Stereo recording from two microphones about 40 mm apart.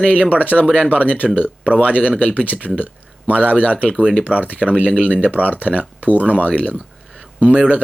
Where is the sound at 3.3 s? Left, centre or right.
Right.